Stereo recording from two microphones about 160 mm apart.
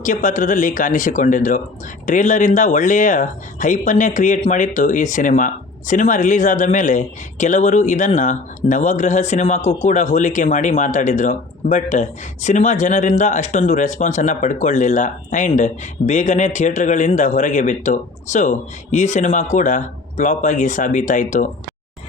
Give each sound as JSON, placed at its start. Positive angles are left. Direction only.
{"t": 0.0, "sound": "speech", "side_deg": 55}